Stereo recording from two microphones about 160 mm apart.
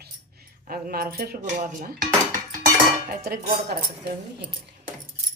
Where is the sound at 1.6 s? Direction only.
50° right (ahead or behind).